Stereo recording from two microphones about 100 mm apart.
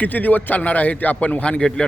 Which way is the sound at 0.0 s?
15° left (ahead or behind).